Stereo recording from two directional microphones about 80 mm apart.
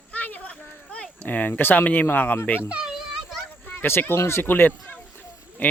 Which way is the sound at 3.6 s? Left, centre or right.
Left.